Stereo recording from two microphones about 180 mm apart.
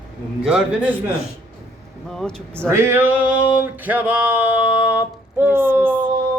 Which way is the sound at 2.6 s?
15° right (ahead or behind).